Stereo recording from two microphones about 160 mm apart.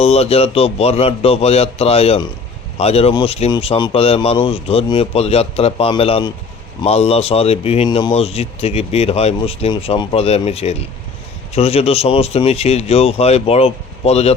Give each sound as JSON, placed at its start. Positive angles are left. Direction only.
{"t": 0.0, "sound": "speech", "side_deg": 40}